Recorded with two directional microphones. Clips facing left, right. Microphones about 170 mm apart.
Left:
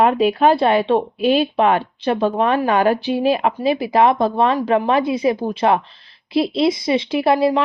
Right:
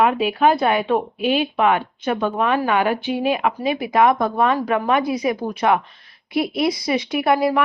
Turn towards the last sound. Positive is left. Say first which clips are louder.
# left 2 dB
turn(degrees=25)  # may be behind; listen again after turning